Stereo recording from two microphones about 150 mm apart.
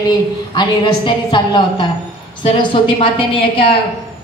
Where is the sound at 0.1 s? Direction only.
30° left (ahead or behind).